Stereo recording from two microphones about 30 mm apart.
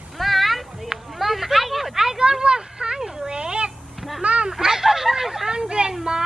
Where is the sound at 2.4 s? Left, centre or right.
Right.